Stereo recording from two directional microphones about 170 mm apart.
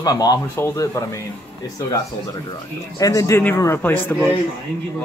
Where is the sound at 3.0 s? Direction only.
20° left (ahead or behind).